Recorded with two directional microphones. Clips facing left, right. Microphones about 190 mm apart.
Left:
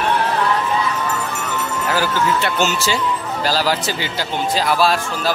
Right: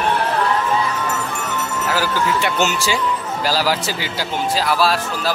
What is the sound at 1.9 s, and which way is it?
Speech, 15° right (ahead or behind).